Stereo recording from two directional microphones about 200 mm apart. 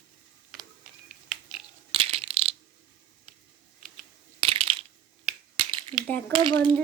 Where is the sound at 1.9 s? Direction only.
30° right (ahead or behind).